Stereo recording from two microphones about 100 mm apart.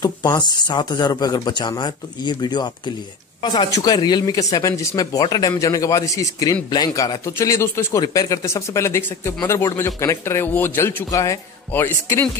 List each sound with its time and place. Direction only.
0.0 s speech: 45° left (ahead or behind)
3.7 s a man's voice: 40° left (ahead or behind); by 11.1 s 20° left (ahead or behind)
11.1 s a man's voice: 35° left (ahead or behind)